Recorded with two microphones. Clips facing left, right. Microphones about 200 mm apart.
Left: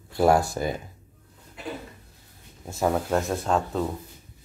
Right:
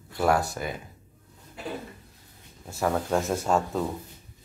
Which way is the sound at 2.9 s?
Centre (ahead or behind).